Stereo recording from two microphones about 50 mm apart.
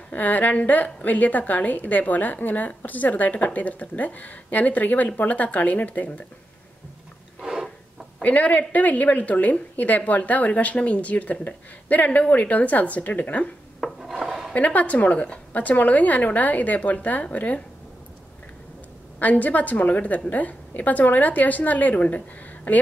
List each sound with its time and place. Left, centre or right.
0.1 s a woman's voice: left
8.2 s a woman's voice: left
13.7 s filing: centre
14.5 s a woman's voice: left
19.1 s a woman's voice: left